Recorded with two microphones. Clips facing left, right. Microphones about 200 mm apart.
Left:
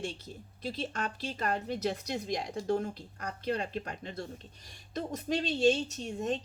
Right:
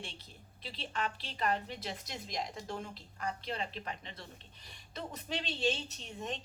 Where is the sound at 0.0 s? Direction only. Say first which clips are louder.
Left 10 dB; 45° left (ahead or behind).